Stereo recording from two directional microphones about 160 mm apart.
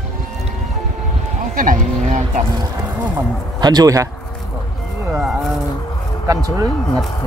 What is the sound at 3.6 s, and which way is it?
Speech, 25° right (ahead or behind).